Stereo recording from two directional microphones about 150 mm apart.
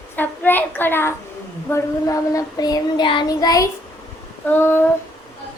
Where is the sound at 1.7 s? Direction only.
20° left (ahead or behind).